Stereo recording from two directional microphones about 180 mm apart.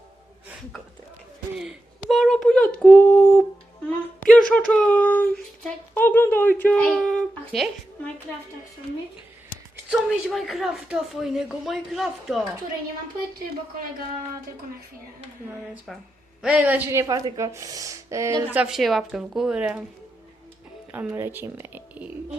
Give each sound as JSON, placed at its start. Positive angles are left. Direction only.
{"t": 1.5, "sound": "a sound", "side_deg": 0}
{"t": 4.3, "sound": "a woman's voice", "side_deg": 5}
{"t": 9.9, "sound": "a woman's voice", "side_deg": 0}
{"t": 15.9, "sound": "a woman's voice", "side_deg": 0}
{"t": 18.6, "sound": "a woman's voice", "side_deg": 0}
{"t": 20.9, "sound": "speech", "side_deg": -10}